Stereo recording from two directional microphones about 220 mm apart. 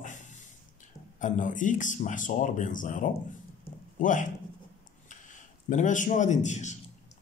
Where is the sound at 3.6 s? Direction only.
35° left (ahead or behind).